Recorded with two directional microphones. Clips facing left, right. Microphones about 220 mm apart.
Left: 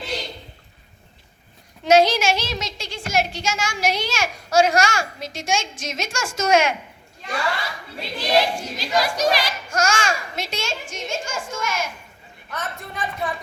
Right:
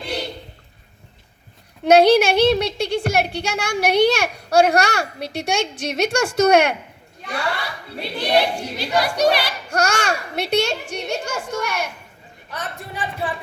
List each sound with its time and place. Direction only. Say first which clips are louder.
1.8 s speech: right 4 dB; 60° right (ahead or behind)
12.5 s speech: even; 35° right (ahead or behind)